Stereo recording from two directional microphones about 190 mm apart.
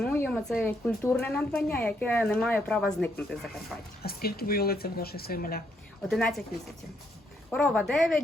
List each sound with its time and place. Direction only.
0.0 s speech: 5° left (ahead or behind)
4.0 s speech: 55° left (ahead or behind)
6.1 s speech: centre (ahead or behind)
7.5 s speech: 5° left (ahead or behind)